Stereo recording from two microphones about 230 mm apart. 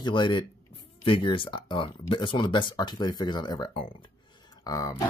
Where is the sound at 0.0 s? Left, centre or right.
Left.